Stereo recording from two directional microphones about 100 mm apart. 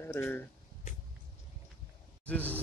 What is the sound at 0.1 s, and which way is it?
Speech, 25° left (ahead or behind).